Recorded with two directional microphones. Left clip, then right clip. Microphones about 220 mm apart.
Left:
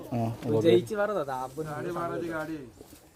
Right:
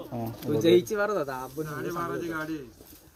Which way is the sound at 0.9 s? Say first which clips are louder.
Right 1 dB; 45° right (ahead or behind).